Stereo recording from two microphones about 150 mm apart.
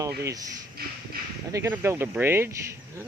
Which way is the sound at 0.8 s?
90° right.